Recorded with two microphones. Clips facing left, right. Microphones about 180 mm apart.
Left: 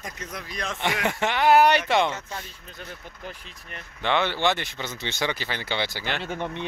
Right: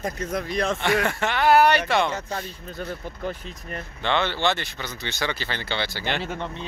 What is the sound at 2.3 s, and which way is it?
Speech, 45° right (ahead or behind).